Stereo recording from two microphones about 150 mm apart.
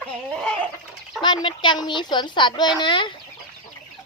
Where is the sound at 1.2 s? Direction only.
30° left (ahead or behind).